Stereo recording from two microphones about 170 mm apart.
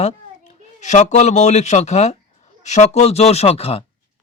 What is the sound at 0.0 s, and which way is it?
A child's voice, 45° left (ahead or behind).